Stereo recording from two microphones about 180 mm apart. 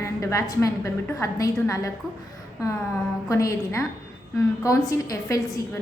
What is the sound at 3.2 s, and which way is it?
A woman's voice, 15° left (ahead or behind).